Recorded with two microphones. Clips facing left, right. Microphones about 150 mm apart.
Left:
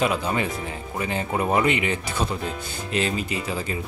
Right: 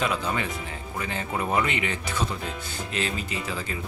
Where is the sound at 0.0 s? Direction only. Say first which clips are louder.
Left 4 dB; 15° left (ahead or behind).